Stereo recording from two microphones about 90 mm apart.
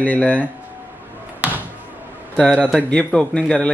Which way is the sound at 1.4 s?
20° right (ahead or behind).